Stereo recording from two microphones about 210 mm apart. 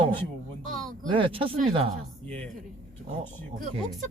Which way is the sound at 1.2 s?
25° right (ahead or behind).